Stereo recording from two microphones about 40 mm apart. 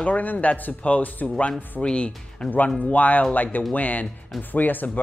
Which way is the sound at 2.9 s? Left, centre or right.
Left.